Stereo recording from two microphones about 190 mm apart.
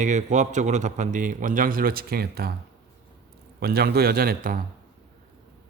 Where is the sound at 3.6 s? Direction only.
55° right (ahead or behind).